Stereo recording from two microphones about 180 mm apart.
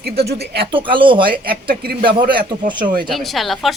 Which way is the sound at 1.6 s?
55° right (ahead or behind).